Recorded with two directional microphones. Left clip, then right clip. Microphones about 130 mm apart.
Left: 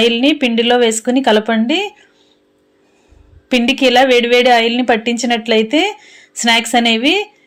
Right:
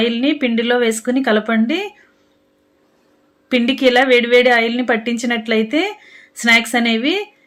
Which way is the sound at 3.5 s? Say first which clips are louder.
Left 2 dB; 20° left (ahead or behind).